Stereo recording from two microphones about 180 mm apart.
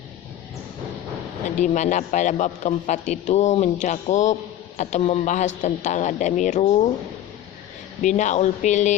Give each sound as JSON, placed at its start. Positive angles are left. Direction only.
{"t": 1.5, "sound": "a man's voice", "side_deg": 40}
{"t": 8.0, "sound": "a man's voice", "side_deg": 40}